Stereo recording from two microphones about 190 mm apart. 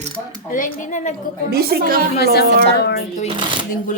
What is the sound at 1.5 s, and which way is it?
Speech, 55° right (ahead or behind).